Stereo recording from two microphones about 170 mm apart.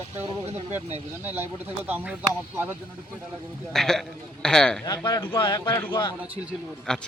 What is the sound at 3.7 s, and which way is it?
A man's voice, 5° left (ahead or behind).